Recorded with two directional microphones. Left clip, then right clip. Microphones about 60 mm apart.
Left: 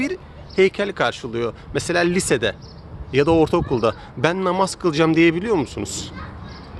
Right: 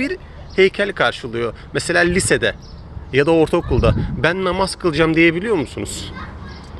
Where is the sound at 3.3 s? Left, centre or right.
Left.